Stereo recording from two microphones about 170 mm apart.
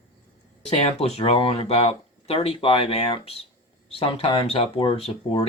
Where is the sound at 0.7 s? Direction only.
35° left (ahead or behind).